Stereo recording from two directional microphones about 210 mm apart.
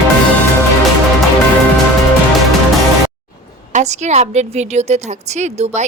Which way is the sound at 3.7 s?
35° right (ahead or behind).